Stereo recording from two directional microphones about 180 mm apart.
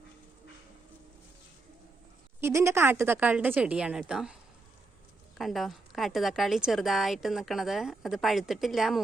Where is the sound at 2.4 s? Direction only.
15° right (ahead or behind).